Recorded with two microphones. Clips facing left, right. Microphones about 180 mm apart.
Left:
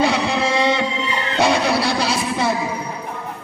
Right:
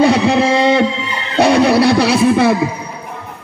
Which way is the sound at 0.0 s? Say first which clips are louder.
Right 7 dB; 50° right (ahead or behind).